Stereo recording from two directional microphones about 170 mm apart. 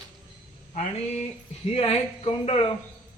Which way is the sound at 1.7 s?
35° left (ahead or behind).